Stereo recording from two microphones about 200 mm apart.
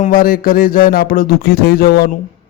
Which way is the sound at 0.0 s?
45° left (ahead or behind).